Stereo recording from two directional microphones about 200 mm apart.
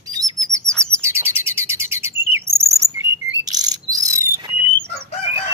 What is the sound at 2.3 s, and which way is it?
Chirp, 15° right (ahead or behind).